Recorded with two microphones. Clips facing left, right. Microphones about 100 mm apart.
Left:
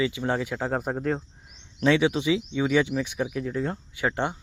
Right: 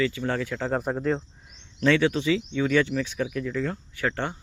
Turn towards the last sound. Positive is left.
turn(degrees=15)  # may be behind; listen again after turning